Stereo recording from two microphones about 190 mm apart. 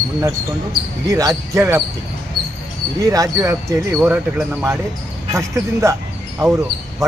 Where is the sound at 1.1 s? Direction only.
15° right (ahead or behind).